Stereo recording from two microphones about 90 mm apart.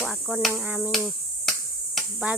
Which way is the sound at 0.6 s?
15° right (ahead or behind).